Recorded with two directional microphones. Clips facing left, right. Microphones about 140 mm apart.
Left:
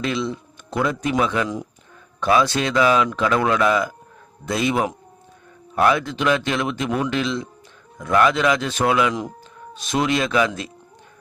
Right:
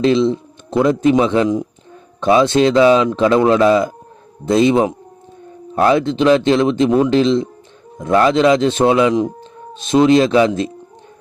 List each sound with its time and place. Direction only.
0.0 s speech: 25° right (ahead or behind)